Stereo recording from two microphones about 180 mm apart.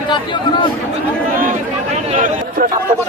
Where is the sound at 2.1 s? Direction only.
45° right (ahead or behind).